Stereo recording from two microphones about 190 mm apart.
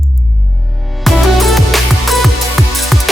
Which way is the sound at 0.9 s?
Centre (ahead or behind).